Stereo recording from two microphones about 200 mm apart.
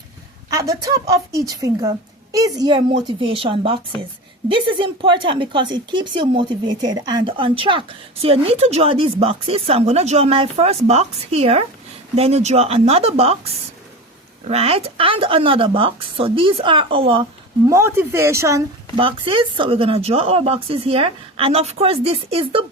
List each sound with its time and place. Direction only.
0.5 s a woman's voice: 15° right (ahead or behind)
17.7 s a woman's voice: 15° right (ahead or behind)
18.9 s a woman's voice: 25° right (ahead or behind)